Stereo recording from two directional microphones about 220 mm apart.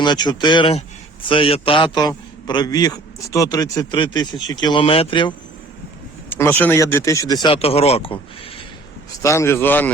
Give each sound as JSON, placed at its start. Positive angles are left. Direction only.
{"t": 0.0, "sound": "a man's voice", "side_deg": 20}
{"t": 6.3, "sound": "speech", "side_deg": 10}
{"t": 9.2, "sound": "speech", "side_deg": 10}